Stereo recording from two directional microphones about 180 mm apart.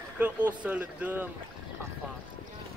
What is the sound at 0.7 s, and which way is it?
Speech, 10° right (ahead or behind).